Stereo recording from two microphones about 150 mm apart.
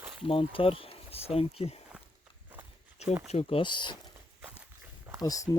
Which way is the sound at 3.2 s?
40° left (ahead or behind).